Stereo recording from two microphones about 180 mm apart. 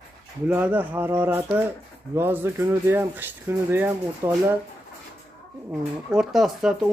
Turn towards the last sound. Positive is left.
turn(degrees=0)  # may be behind; listen again after turning